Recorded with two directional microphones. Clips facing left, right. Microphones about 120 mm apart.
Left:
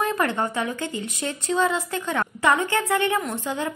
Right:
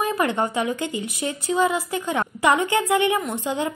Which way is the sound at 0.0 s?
15° right (ahead or behind).